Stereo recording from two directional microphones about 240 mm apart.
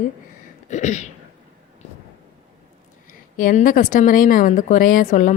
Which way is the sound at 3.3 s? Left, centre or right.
Left.